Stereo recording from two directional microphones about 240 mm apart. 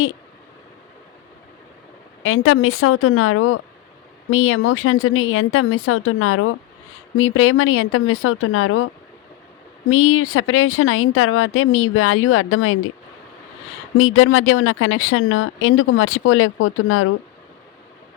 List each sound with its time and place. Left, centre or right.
2.2 s a woman's voice: left
9.9 s a woman's voice: left
13.9 s a woman's voice: left